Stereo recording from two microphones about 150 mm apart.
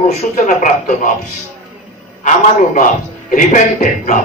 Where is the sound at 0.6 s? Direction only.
60° left (ahead or behind).